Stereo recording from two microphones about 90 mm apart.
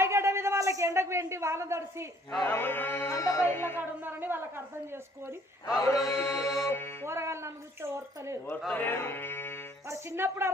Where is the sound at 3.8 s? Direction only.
25° right (ahead or behind).